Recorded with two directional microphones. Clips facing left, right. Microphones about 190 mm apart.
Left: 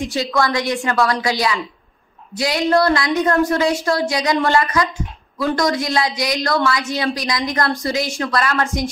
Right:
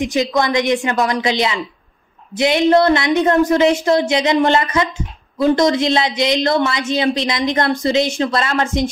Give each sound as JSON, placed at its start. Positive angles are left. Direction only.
{"t": 0.0, "sound": "a woman's voice", "side_deg": -20}